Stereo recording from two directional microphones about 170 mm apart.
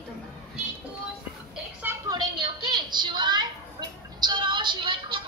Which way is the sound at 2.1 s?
25° right (ahead or behind).